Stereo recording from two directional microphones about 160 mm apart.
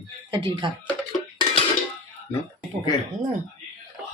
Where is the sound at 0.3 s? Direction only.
30° right (ahead or behind).